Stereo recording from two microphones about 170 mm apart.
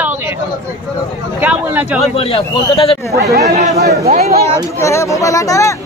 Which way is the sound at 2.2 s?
35° left (ahead or behind).